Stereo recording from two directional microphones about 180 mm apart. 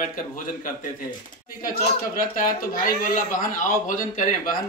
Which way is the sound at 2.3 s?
50° left (ahead or behind).